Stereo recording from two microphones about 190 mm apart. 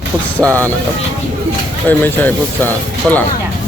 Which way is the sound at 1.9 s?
10° left (ahead or behind).